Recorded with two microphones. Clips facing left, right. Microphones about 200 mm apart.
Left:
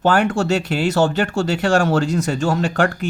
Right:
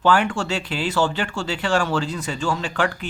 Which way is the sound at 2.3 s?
60° left (ahead or behind).